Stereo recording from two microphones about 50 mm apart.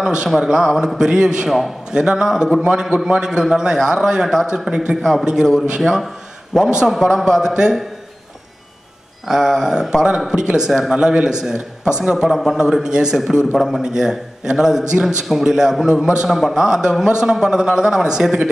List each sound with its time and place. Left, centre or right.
0.0 s speech: centre
9.3 s speech: centre